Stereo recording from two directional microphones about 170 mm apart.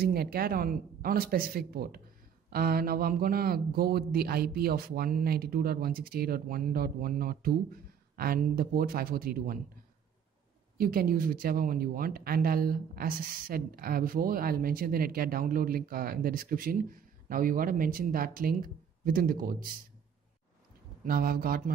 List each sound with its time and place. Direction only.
0.0 s speech: 60° right (ahead or behind)
10.8 s speech: 60° right (ahead or behind)
21.0 s speech: 60° right (ahead or behind)